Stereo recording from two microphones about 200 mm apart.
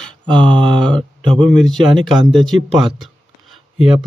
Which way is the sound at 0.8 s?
5° left (ahead or behind).